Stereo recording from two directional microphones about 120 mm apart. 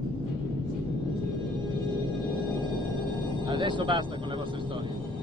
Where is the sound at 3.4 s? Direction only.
40° right (ahead or behind).